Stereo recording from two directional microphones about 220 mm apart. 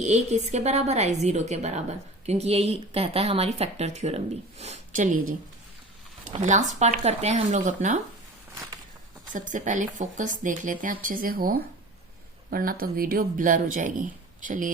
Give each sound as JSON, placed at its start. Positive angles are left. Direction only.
{"t": 0.0, "sound": "a woman's voice", "side_deg": -30}
{"t": 6.4, "sound": "speech", "side_deg": -30}
{"t": 9.3, "sound": "speech", "side_deg": -35}